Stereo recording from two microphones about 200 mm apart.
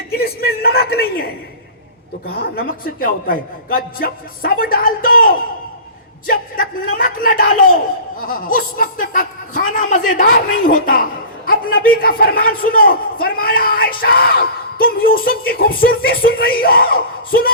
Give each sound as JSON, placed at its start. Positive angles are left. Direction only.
{"t": 0.1, "sound": "a sound", "side_deg": 50}
{"t": 2.2, "sound": "a man's voice", "side_deg": 50}
{"t": 7.0, "sound": "a man's voice", "side_deg": 45}